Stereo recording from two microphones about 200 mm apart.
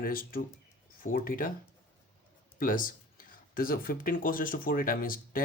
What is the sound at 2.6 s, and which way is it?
Speech, 45° left (ahead or behind).